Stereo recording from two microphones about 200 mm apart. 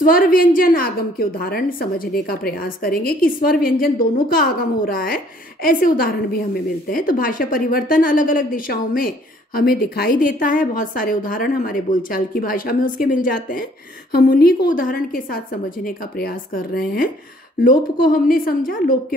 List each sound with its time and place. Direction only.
0.0 s a woman's voice: 45° left (ahead or behind)